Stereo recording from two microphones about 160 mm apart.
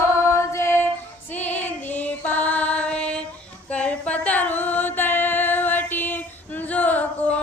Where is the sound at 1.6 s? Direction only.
10° left (ahead or behind).